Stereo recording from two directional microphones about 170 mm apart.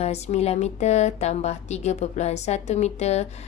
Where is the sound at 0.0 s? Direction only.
40° left (ahead or behind).